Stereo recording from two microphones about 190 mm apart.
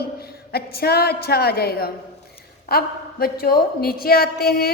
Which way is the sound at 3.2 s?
50° left (ahead or behind).